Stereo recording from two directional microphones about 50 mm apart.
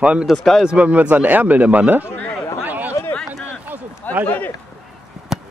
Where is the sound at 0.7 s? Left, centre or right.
Right.